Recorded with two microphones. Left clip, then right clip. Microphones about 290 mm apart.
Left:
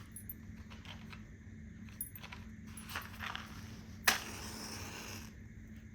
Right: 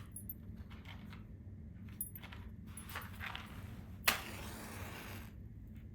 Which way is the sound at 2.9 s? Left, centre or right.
Left.